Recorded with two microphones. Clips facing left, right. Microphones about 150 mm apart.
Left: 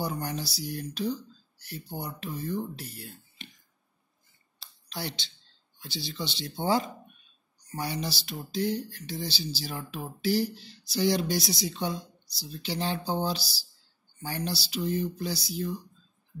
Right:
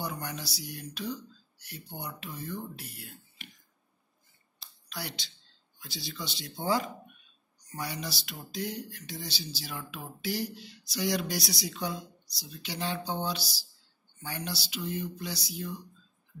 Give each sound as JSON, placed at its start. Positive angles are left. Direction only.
{"t": 0.0, "sound": "speech", "side_deg": 30}
{"t": 4.8, "sound": "speech", "side_deg": 25}